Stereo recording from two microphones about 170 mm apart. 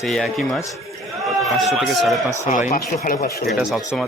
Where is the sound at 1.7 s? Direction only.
Centre (ahead or behind).